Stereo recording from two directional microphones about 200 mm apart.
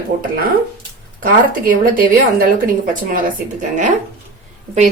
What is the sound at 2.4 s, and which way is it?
A woman's voice, 45° right (ahead or behind).